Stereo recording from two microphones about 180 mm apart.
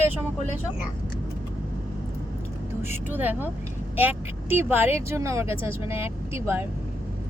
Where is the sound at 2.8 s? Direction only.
10° right (ahead or behind).